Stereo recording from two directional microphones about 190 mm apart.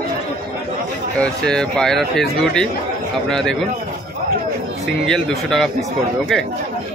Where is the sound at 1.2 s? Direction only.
5° left (ahead or behind).